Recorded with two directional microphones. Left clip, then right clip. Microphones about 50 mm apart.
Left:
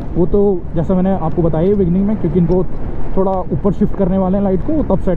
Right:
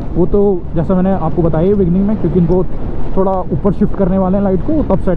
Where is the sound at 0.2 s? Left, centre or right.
Left.